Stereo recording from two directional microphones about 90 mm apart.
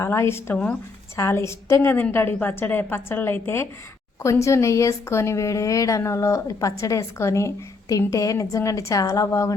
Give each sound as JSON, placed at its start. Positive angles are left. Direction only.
{"t": 0.0, "sound": "a woman's voice", "side_deg": 30}
{"t": 0.5, "sound": "speech", "side_deg": 15}
{"t": 1.1, "sound": "a woman's voice", "side_deg": 30}